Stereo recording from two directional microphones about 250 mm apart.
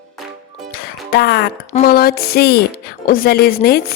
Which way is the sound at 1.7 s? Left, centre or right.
Left.